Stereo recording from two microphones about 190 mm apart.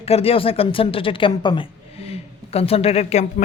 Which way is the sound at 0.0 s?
30° left (ahead or behind).